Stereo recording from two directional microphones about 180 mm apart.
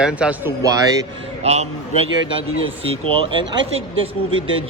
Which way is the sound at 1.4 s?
35° right (ahead or behind).